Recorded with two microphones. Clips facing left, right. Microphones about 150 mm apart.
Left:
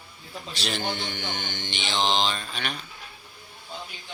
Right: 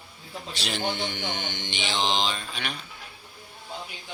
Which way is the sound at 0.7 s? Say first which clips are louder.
Right 1 dB; 15° right (ahead or behind).